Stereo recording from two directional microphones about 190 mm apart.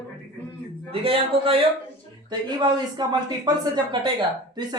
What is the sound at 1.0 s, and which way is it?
Speech, 30° right (ahead or behind).